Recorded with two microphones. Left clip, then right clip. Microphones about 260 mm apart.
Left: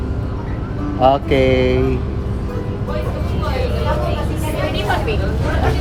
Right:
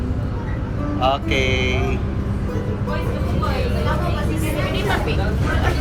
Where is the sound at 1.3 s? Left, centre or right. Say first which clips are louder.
Left 6 dB; left.